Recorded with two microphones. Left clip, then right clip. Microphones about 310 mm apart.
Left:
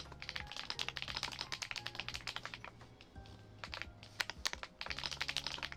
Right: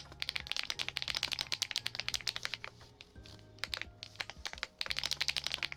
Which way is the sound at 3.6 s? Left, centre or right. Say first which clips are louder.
Right 6 dB; right.